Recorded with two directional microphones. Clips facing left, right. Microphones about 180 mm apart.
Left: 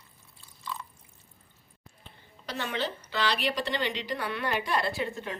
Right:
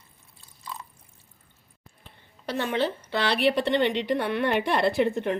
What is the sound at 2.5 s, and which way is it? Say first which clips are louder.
Speech: right 6 dB; 55° right (ahead or behind).